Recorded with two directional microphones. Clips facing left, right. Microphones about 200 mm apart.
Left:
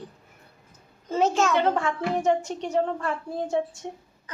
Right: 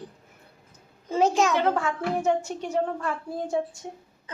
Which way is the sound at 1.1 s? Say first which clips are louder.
Right 1 dB; 10° right (ahead or behind).